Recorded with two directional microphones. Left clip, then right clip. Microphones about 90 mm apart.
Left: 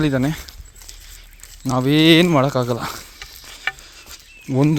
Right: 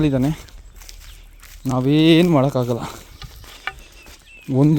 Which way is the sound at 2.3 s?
25° right (ahead or behind).